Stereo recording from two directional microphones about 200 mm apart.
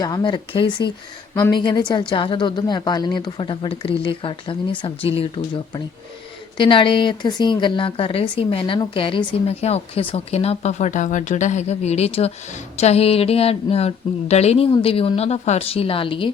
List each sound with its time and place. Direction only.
0.0 s speech: 20° left (ahead or behind)
6.6 s speech: 25° left (ahead or behind)